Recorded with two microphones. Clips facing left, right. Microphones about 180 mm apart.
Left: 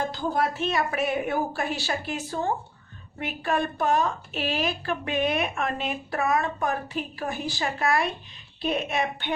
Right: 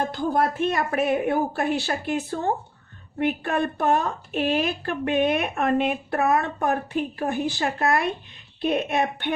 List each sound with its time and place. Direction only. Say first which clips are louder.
0.1 s a woman's voice: right 3 dB; 55° right (ahead or behind)